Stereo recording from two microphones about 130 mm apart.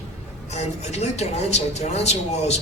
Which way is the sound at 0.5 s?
60° left (ahead or behind).